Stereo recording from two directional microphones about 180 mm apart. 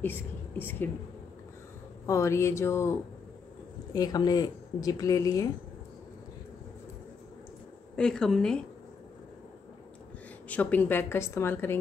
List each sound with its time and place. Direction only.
0.0 s a woman's voice: 10° left (ahead or behind)
2.0 s a woman's voice: 15° left (ahead or behind)
7.9 s a woman's voice: 5° left (ahead or behind)
10.5 s a woman's voice: 10° left (ahead or behind)